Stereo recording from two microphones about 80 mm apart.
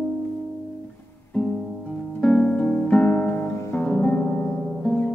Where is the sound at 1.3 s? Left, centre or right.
Centre.